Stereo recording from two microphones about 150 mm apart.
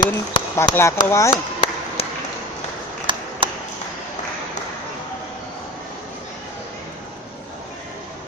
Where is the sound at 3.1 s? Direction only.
35° right (ahead or behind).